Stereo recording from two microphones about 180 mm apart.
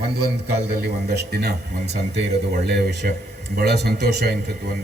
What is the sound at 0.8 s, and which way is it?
A man's voice, 65° right (ahead or behind).